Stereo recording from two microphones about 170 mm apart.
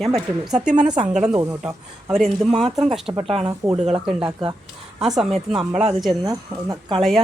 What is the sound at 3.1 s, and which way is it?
Speech, 30° right (ahead or behind).